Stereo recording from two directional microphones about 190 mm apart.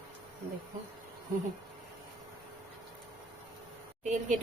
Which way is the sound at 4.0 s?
40° right (ahead or behind).